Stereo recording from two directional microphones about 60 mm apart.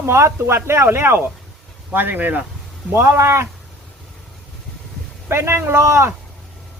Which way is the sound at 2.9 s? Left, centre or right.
Right.